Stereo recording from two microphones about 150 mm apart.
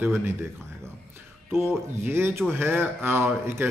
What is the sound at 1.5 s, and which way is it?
Speech, 15° right (ahead or behind).